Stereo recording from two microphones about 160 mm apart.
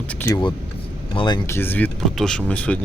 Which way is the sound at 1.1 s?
30° left (ahead or behind).